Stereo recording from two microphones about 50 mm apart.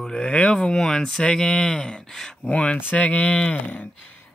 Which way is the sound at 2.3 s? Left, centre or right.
Left.